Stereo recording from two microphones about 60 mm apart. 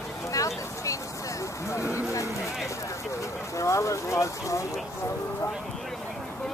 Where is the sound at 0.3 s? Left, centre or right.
Left.